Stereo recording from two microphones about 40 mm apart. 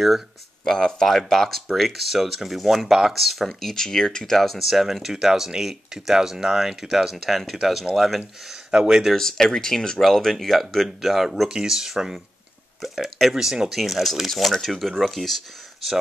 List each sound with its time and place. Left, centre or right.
0.7 s speech: centre
3.4 s speech: centre
8.7 s speech: right
9.1 s speech: centre